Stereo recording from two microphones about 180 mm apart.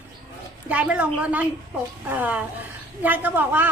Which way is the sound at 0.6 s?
10° right (ahead or behind).